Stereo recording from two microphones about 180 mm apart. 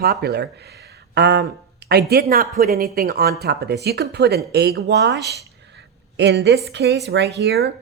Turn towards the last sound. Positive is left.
turn(degrees=-65)  # may be behind; listen again after turning